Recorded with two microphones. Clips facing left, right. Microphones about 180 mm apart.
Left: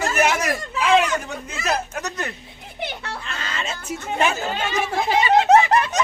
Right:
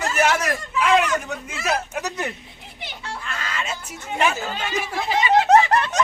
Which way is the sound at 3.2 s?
25° left (ahead or behind).